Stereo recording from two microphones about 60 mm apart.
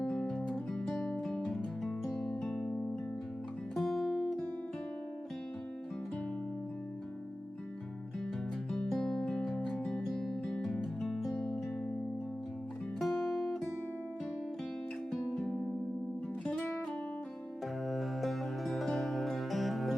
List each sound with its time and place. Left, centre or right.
0.0 s music: centre
3.8 s music: centre
9.0 s music: centre
11.3 s music: centre
13.0 s music: centre
16.4 s music: centre
17.8 s music: centre